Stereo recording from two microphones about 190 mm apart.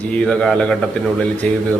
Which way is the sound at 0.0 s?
5° left (ahead or behind).